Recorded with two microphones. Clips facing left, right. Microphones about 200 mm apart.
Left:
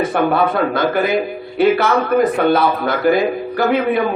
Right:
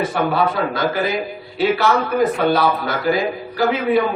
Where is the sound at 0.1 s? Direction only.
55° left (ahead or behind).